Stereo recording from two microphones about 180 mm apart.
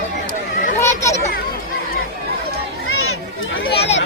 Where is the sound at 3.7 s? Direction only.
35° left (ahead or behind).